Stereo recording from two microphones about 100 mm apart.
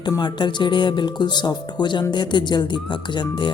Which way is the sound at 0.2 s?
50° left (ahead or behind).